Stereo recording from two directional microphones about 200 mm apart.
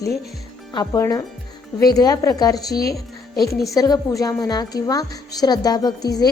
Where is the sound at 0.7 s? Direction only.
20° left (ahead or behind).